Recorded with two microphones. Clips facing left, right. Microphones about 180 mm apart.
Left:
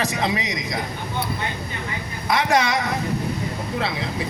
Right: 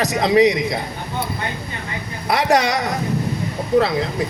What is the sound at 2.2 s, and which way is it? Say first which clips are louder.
Speech: right 3 dB; 35° right (ahead or behind).